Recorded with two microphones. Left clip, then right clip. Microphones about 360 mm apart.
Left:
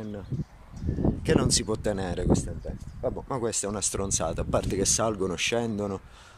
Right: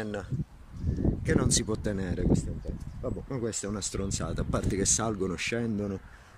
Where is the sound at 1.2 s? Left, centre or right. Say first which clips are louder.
Left 3 dB; centre.